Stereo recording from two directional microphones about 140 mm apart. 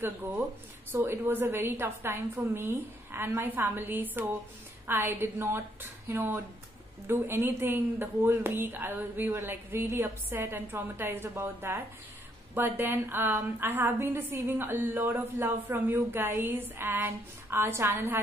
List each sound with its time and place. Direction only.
0.9 s a woman's voice: 15° right (ahead or behind)